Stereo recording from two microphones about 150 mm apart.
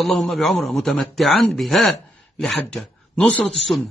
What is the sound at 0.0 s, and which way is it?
A man's voice, centre (ahead or behind).